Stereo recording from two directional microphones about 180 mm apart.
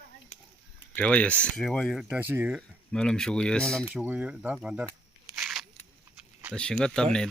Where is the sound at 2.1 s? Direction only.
10° right (ahead or behind).